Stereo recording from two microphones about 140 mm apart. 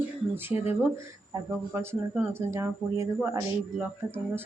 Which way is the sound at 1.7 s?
15° right (ahead or behind).